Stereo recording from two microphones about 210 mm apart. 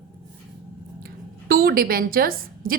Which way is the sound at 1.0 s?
45° right (ahead or behind).